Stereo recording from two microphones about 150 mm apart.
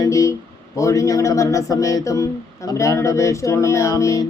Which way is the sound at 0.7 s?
20° left (ahead or behind).